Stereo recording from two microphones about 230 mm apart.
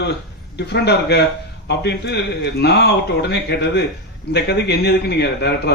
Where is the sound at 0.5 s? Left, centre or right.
Left.